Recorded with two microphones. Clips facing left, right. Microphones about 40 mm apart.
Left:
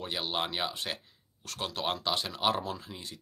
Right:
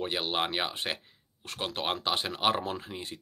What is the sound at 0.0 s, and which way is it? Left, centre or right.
Speech, right.